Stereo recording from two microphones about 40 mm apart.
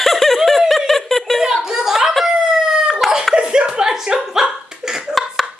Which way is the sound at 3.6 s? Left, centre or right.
Centre.